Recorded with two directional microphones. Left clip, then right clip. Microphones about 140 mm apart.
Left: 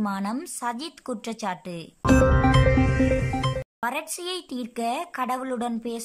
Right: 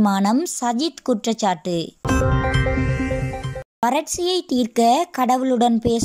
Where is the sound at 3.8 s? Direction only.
35° right (ahead or behind).